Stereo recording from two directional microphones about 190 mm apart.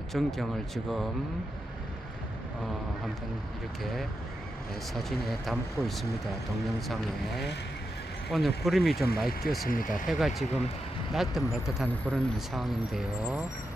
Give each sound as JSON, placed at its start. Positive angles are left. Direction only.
{"t": 0.1, "sound": "speech", "side_deg": 0}
{"t": 3.8, "sound": "speech", "side_deg": 0}
{"t": 8.3, "sound": "speech", "side_deg": 0}
{"t": 8.9, "sound": "speech", "side_deg": 55}
{"t": 9.8, "sound": "speech", "side_deg": 0}